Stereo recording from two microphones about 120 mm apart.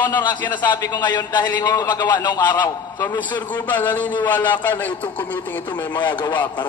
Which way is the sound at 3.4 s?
15° left (ahead or behind).